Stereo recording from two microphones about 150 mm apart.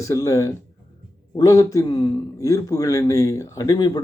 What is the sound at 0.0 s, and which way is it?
Speech, 20° left (ahead or behind).